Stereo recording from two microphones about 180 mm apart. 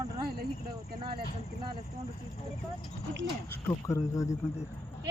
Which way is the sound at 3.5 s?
15° left (ahead or behind).